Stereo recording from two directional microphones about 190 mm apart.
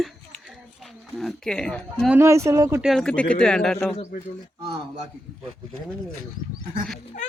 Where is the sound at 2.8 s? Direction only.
Centre (ahead or behind).